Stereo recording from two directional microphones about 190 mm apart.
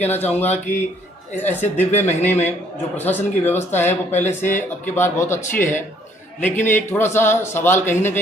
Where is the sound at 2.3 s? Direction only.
10° left (ahead or behind).